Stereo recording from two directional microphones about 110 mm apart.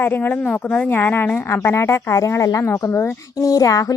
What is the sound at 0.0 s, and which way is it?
A woman's voice, 20° left (ahead or behind).